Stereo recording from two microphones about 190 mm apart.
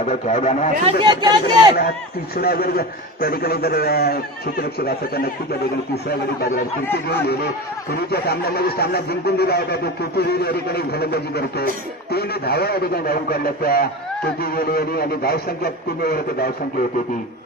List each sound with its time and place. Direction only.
0.0 s a man's voice: 40° left (ahead or behind)
0.8 s speech: 25° right (ahead or behind)
2.3 s a man's voice: 55° left (ahead or behind)
7.1 s a man's voice: 55° left (ahead or behind)